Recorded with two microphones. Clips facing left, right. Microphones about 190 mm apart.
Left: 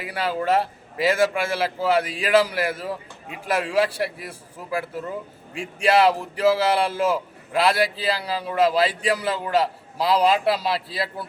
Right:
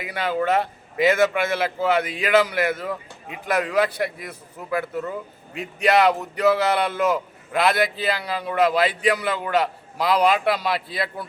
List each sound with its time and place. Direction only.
0.0 s a man's voice: 35° left (ahead or behind)